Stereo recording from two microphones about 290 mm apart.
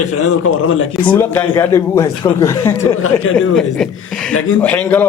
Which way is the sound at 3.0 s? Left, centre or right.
Left.